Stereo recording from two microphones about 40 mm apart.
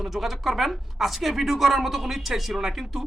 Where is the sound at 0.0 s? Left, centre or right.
Centre.